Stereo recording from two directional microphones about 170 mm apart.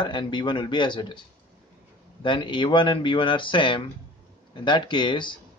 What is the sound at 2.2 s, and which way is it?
Speech, 30° left (ahead or behind).